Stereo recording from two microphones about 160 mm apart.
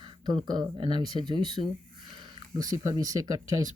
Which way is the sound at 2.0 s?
30° right (ahead or behind).